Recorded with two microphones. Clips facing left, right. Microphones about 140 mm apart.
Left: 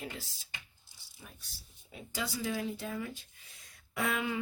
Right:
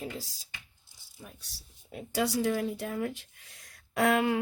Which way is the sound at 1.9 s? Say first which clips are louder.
Right 9 dB; 65° right (ahead or behind).